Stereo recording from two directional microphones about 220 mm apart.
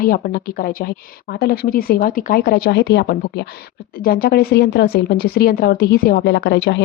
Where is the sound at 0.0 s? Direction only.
40° left (ahead or behind).